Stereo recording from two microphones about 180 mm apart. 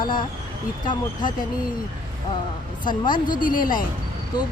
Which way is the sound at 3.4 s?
50° left (ahead or behind).